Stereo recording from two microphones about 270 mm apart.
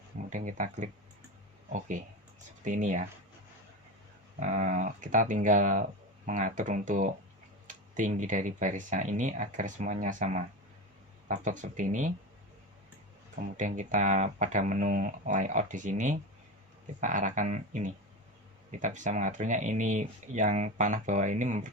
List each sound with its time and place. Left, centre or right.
0.3 s speech: right
4.4 s speech: right
13.6 s speech: right